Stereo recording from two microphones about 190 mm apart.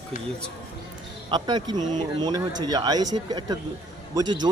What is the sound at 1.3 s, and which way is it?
A man's voice, 20° right (ahead or behind).